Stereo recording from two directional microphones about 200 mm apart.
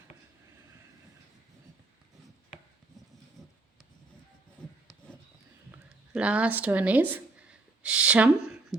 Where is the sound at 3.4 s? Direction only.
Centre (ahead or behind).